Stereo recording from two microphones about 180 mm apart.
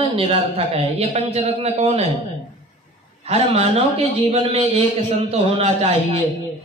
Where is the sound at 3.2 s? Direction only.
35° right (ahead or behind).